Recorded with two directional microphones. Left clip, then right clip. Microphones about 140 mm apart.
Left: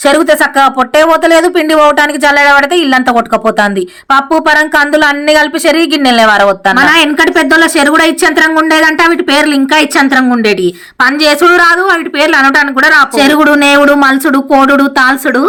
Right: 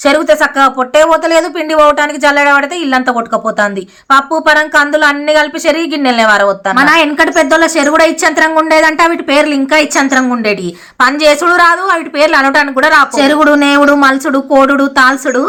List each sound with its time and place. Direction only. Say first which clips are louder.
0.0 s a woman's voice: left 1 dB; 35° left (ahead or behind)